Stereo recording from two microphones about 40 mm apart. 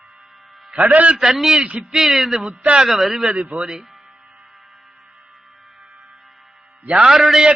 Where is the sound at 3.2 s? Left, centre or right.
Right.